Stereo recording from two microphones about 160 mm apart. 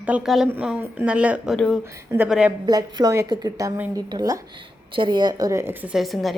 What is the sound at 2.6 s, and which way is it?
A woman's voice, 25° right (ahead or behind).